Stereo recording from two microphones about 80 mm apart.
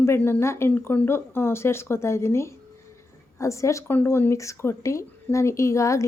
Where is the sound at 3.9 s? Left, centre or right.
Left.